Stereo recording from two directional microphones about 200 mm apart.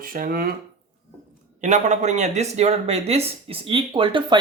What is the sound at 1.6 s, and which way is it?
Speech, 35° right (ahead or behind).